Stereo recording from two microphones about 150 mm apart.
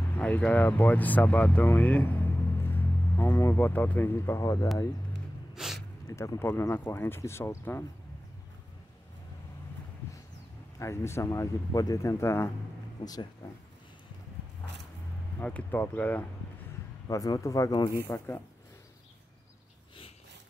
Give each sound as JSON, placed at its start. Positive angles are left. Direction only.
{"t": 0.2, "sound": "speech", "side_deg": 10}
{"t": 5.5, "sound": "a sound", "side_deg": 0}
{"t": 6.0, "sound": "speech", "side_deg": 20}
{"t": 10.8, "sound": "speech", "side_deg": 15}
{"t": 15.3, "sound": "speech", "side_deg": 10}
{"t": 17.1, "sound": "speech", "side_deg": 20}
{"t": 18.0, "sound": "speech", "side_deg": 15}